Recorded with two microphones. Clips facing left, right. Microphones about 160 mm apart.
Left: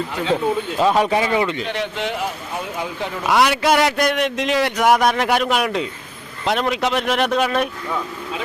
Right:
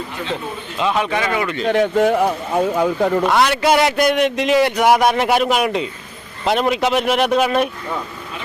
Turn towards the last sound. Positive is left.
turn(degrees=-5)  # may be behind; listen again after turning